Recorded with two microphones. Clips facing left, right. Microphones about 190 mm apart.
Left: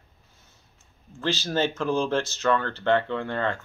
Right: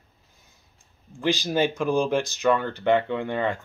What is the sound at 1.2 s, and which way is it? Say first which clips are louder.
Speech: right 3 dB; 15° right (ahead or behind).